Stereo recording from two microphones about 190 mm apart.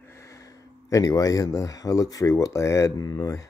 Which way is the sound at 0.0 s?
15° left (ahead or behind).